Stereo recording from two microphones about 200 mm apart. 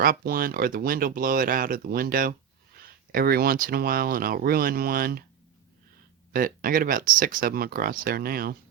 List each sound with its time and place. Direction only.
0.0 s speech: 45° right (ahead or behind)
6.3 s speech: 45° right (ahead or behind)